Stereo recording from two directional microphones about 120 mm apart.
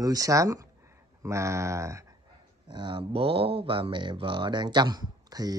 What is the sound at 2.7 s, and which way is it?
Speech, 45° right (ahead or behind).